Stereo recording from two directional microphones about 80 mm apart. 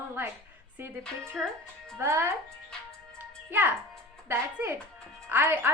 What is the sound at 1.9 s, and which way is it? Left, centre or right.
Speech, right.